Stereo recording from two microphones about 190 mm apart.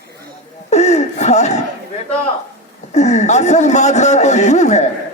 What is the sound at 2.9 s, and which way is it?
A man's voice, 35° left (ahead or behind).